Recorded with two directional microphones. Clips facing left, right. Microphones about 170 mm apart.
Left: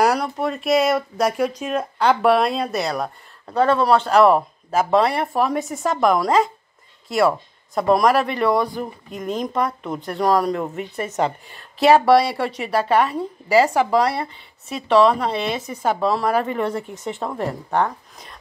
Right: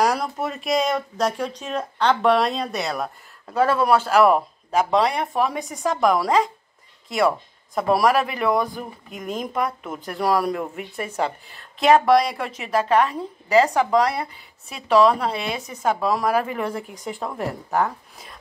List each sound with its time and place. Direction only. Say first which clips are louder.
0.0 s speech: left 3 dB; 5° left (ahead or behind)
12.4 s speech: left 6 dB; 35° left (ahead or behind)
12.6 s a woman's voice: even; 5° left (ahead or behind)